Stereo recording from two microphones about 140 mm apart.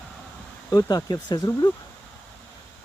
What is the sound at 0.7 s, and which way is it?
Speech, 25° left (ahead or behind).